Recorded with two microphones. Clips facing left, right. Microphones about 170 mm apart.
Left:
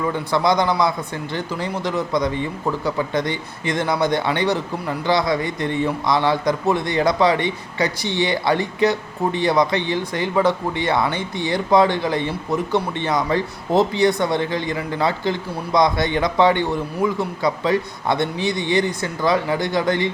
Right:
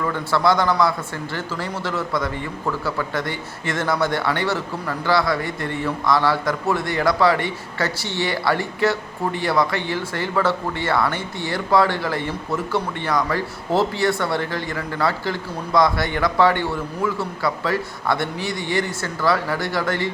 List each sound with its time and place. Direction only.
0.0 s speech: 15° left (ahead or behind)